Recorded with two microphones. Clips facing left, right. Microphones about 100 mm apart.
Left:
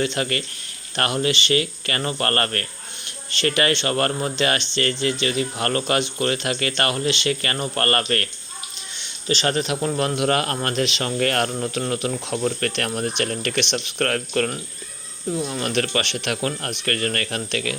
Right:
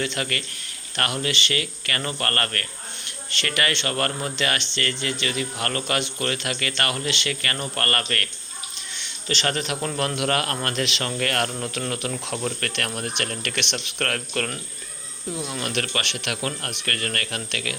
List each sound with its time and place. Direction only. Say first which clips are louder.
0.0 s speech: left 4 dB; 25° left (ahead or behind)
9.5 s speech: left 4 dB; 25° left (ahead or behind)